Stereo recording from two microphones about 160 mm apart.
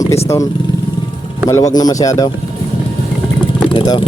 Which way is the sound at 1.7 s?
25° left (ahead or behind).